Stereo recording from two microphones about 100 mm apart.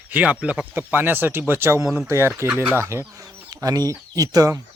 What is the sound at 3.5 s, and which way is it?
Speech, 40° right (ahead or behind).